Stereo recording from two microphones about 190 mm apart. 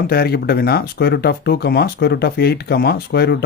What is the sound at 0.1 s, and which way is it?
Speech, 55° left (ahead or behind).